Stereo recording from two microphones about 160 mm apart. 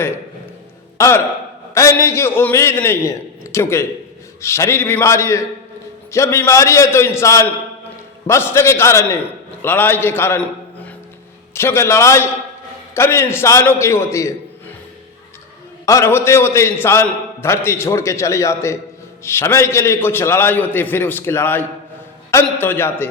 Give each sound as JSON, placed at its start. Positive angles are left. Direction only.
{"t": 0.9, "sound": "a man's voice", "side_deg": 20}
{"t": 11.5, "sound": "a man's voice", "side_deg": 15}
{"t": 15.9, "sound": "a man's voice", "side_deg": 20}